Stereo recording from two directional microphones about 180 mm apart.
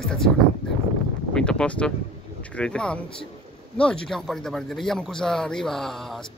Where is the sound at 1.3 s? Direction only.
5° left (ahead or behind).